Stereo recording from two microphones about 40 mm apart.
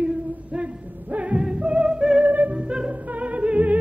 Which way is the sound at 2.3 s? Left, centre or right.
Right.